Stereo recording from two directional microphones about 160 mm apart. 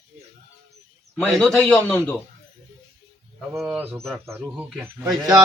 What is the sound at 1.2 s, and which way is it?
A man's voice, centre (ahead or behind).